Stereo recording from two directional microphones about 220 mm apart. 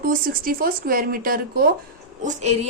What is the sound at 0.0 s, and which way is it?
A woman's voice, 40° right (ahead or behind).